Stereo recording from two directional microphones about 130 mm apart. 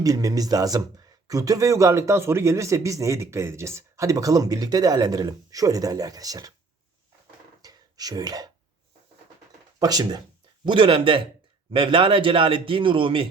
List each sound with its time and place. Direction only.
0.0 s speech: 25° right (ahead or behind)
7.6 s throat clearing: 30° right (ahead or behind)
9.7 s speech: 30° right (ahead or behind)
10.7 s speech: 40° right (ahead or behind)